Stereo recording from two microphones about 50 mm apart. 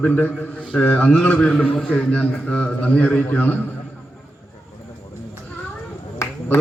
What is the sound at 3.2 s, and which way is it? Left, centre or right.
Speech, left.